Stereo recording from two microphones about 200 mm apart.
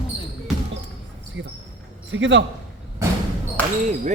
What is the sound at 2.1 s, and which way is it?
Speech, 65° right (ahead or behind).